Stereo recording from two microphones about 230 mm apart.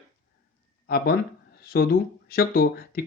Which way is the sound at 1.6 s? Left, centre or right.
Left.